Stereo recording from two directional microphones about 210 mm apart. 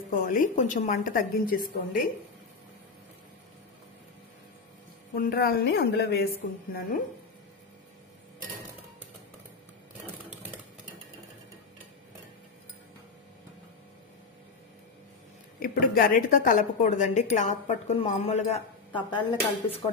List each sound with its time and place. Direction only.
0.1 s a woman's voice: 40° left (ahead or behind)
5.1 s a woman's voice: 45° left (ahead or behind)
15.6 s a woman's voice: 45° left (ahead or behind); by 19.7 s 20° left (ahead or behind)